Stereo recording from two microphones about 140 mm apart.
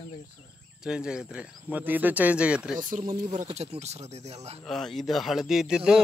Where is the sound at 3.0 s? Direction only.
50° right (ahead or behind).